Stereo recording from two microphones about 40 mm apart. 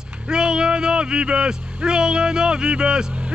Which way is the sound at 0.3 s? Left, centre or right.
Centre.